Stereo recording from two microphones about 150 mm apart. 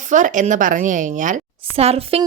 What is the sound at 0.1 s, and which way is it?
A woman's voice, 55° right (ahead or behind).